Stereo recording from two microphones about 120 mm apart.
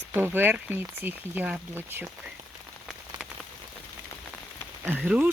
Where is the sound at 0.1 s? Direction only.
15° right (ahead or behind).